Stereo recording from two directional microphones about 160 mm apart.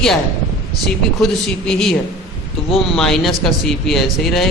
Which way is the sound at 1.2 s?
5° left (ahead or behind).